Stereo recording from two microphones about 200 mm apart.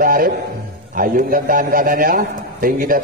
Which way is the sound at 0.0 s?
45° right (ahead or behind).